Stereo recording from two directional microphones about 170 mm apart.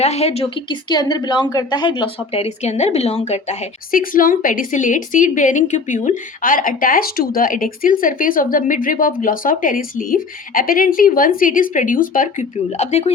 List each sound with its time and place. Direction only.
0.0 s speech: 40° left (ahead or behind)
3.9 s a woman's voice: 55° left (ahead or behind); by 13.1 s 40° left (ahead or behind)